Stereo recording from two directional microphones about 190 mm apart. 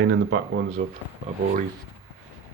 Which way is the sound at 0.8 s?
40° right (ahead or behind).